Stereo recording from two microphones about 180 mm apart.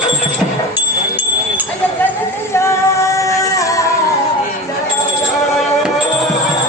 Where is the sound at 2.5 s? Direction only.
15° left (ahead or behind).